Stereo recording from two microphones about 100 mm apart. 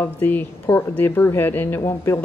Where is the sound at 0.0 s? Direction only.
20° left (ahead or behind).